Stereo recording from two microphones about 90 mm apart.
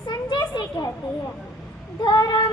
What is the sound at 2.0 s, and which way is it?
Child singing, 45° left (ahead or behind).